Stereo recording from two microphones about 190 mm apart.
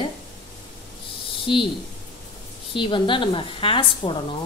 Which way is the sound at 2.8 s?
25° left (ahead or behind).